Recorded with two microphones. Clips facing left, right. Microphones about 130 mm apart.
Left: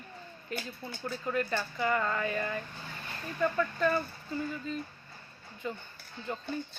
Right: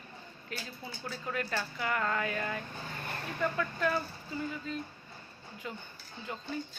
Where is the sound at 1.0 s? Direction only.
Centre (ahead or behind).